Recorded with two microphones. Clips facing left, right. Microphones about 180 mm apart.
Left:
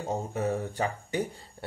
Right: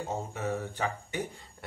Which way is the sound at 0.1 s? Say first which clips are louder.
Left 5 dB; 40° left (ahead or behind).